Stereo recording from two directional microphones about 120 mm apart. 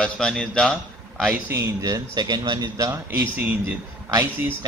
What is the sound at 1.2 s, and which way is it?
A man's voice, 20° right (ahead or behind).